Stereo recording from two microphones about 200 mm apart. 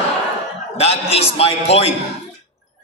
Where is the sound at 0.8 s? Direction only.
30° left (ahead or behind).